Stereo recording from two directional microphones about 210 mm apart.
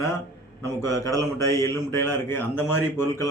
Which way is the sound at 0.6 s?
15° left (ahead or behind).